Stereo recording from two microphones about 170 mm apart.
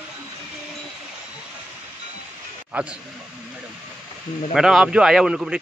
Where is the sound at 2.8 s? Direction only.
10° right (ahead or behind).